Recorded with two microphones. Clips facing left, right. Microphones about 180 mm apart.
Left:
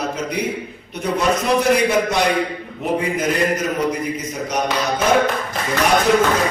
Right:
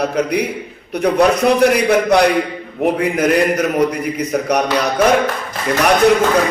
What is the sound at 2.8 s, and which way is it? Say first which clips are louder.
Speech: right 5 dB; 65° right (ahead or behind).